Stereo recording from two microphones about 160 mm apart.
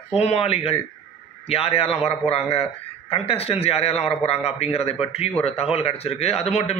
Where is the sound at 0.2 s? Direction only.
40° left (ahead or behind).